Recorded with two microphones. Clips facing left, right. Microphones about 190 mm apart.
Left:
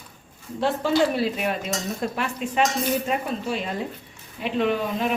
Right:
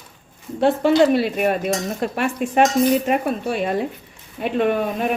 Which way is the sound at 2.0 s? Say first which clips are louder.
Right 5 dB; 60° right (ahead or behind).